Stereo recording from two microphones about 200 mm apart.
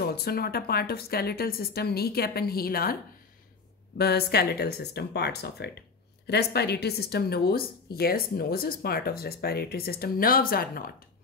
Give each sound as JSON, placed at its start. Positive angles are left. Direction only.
{"t": 0.0, "sound": "speech", "side_deg": 50}
{"t": 4.0, "sound": "speech", "side_deg": 55}